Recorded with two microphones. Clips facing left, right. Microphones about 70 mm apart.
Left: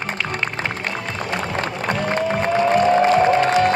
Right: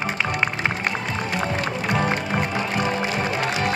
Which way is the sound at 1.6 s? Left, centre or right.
Left.